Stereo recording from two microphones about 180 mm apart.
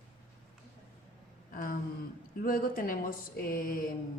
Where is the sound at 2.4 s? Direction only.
50° left (ahead or behind).